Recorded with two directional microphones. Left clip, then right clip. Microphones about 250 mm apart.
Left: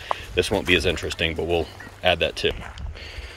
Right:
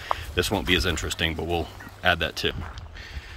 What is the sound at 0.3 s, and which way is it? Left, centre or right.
Speech, centre.